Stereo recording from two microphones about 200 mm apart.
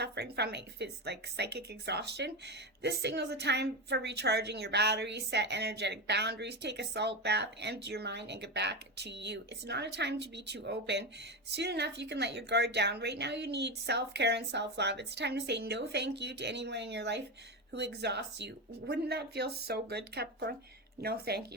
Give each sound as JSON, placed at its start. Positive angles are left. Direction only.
{"t": 0.0, "sound": "a woman's voice", "side_deg": -55}